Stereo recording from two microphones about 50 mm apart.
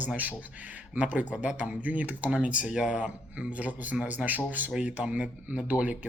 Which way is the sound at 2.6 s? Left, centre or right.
Centre.